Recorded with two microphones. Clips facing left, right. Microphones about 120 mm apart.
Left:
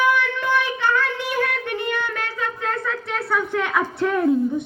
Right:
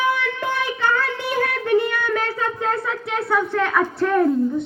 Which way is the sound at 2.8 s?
15° right (ahead or behind).